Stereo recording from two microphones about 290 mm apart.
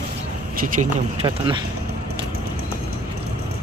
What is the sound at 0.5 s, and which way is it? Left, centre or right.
Speech, right.